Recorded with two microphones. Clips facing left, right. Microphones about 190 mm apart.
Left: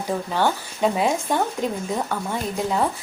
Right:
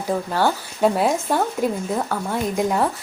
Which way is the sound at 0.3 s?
5° right (ahead or behind).